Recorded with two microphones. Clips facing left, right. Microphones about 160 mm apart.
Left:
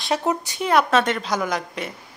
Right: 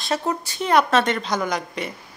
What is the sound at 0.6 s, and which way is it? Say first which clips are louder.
A woman's voice: even; 5° left (ahead or behind).